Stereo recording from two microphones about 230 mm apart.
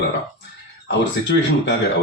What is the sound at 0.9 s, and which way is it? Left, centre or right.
Speech, left.